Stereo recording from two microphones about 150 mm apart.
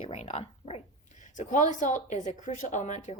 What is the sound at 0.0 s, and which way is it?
Speech, 40° left (ahead or behind).